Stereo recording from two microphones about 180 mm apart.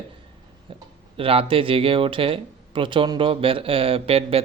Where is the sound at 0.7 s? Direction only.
30° right (ahead or behind).